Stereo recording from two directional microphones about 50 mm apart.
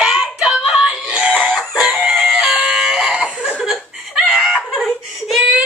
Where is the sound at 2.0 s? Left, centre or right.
Centre.